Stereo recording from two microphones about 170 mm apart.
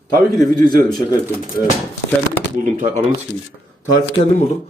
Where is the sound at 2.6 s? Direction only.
45° right (ahead or behind).